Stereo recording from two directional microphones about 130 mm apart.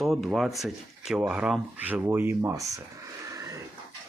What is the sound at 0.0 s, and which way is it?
Speech, centre (ahead or behind).